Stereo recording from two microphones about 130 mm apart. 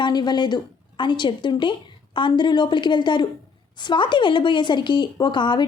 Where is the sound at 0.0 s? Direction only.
35° left (ahead or behind).